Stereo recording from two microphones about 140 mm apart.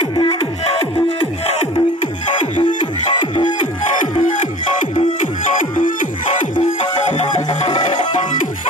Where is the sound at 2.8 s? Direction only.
35° left (ahead or behind).